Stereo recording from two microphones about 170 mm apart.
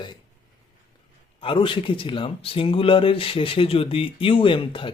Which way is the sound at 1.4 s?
30° left (ahead or behind).